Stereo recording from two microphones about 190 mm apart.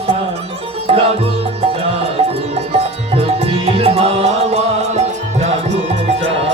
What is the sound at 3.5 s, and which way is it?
Music, 30° right (ahead or behind).